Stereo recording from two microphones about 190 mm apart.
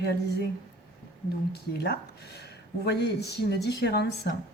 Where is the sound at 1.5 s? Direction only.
60° left (ahead or behind).